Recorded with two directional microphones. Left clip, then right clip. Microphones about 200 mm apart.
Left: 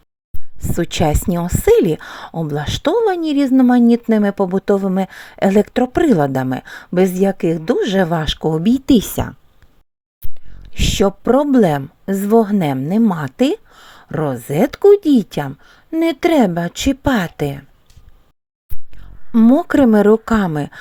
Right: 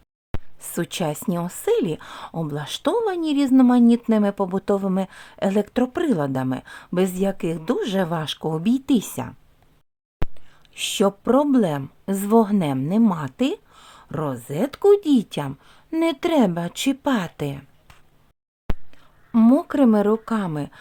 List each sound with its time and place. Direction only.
0.6 s speech: 25° left (ahead or behind)
10.6 s a woman's voice: 20° left (ahead or behind)
19.3 s a woman's voice: 10° left (ahead or behind)
19.6 s speech: 25° left (ahead or behind)